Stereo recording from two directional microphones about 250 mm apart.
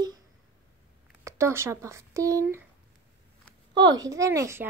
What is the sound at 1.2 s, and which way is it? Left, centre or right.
Speech, centre.